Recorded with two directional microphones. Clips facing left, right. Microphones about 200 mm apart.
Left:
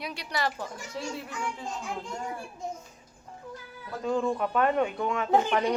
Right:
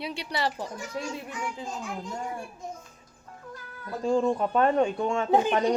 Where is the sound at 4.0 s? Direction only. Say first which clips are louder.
Right 3 dB; 30° right (ahead or behind).